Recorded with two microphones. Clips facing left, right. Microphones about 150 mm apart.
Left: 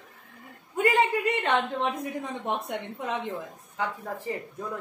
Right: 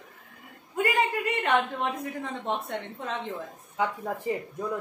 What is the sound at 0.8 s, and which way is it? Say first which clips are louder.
A woman's voice: left 3 dB; 25° left (ahead or behind).